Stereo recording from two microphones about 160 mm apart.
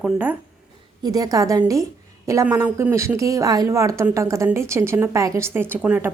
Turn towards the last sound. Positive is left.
turn(degrees=-10)  # may be behind; listen again after turning